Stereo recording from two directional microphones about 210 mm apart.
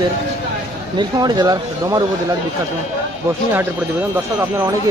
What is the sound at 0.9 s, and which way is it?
Speech, 20° right (ahead or behind).